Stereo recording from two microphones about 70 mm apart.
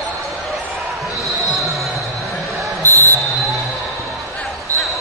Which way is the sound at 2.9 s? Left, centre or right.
Left.